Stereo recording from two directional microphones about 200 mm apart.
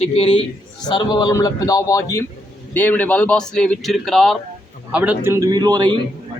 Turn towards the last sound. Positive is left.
turn(degrees=-20)  # may be behind; listen again after turning